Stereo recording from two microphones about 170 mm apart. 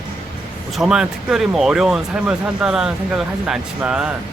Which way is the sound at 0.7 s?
5° right (ahead or behind).